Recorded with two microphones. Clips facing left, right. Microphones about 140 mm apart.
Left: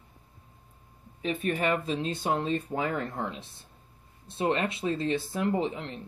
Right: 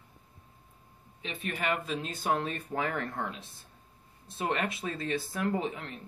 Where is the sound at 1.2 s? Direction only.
40° left (ahead or behind).